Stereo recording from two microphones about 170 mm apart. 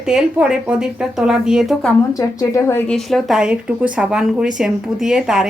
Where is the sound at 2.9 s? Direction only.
Centre (ahead or behind).